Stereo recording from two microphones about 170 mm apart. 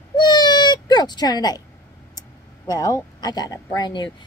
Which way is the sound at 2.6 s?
20° left (ahead or behind).